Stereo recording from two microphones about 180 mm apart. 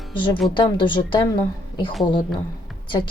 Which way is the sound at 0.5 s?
25° left (ahead or behind).